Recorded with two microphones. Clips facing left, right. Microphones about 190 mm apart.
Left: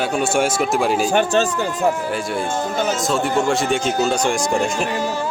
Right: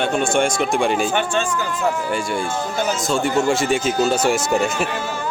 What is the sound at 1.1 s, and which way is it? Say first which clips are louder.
Speech: left 4 dB; 40° left (ahead or behind).